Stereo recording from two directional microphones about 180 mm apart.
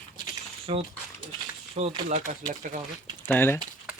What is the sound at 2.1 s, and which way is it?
Speech, 45° right (ahead or behind).